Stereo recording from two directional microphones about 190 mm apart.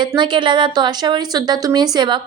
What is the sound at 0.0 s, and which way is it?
A woman's voice, 25° right (ahead or behind).